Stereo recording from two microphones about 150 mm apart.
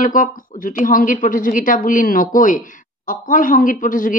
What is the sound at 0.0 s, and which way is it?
Speech, 60° left (ahead or behind).